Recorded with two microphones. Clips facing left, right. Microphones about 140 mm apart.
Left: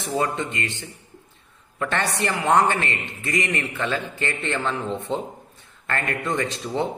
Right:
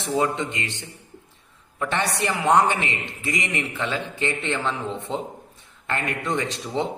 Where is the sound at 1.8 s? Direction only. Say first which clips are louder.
Even; 15° right (ahead or behind).